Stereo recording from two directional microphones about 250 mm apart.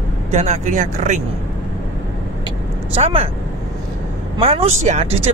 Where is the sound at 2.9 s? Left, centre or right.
Right.